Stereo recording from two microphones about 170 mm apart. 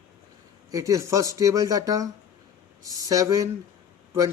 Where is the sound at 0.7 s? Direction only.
20° right (ahead or behind).